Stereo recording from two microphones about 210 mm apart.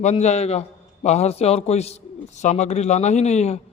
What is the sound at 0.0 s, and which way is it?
A man's voice, 35° left (ahead or behind).